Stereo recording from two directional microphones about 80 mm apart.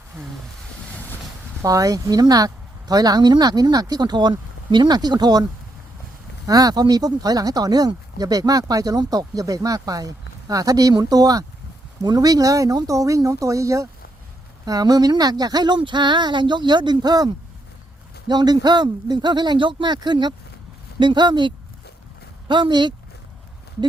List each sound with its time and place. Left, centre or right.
1.6 s speech: right
6.5 s speech: right
14.6 s speech: right